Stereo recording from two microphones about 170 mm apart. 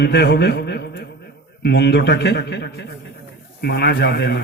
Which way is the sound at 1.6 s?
85° left.